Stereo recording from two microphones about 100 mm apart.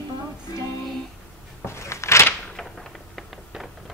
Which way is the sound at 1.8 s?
30° left (ahead or behind).